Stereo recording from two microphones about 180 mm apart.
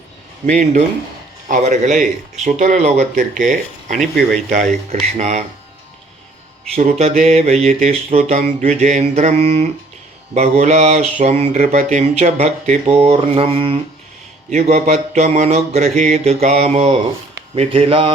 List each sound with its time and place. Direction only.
0.4 s a man's voice: 40° right (ahead or behind)
4.9 s mantra: 40° right (ahead or behind)
6.7 s mantra: 40° right (ahead or behind)